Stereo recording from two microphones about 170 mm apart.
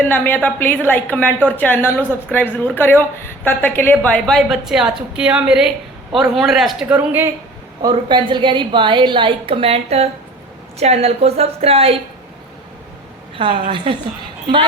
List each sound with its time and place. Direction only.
0.0 s a woman's voice: 10° left (ahead or behind); by 7.3 s 10° right (ahead or behind)
7.8 s a woman's voice: 25° right (ahead or behind)
13.3 s a woman's voice: 30° right (ahead or behind)